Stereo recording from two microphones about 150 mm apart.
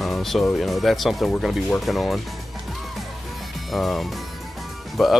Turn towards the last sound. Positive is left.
turn(degrees=0)  # may be behind; listen again after turning